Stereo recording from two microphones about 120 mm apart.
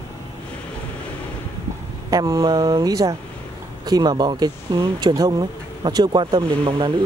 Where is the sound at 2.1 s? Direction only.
30° right (ahead or behind).